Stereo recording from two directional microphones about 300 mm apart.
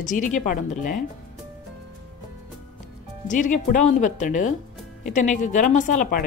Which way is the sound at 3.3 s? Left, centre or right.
Left.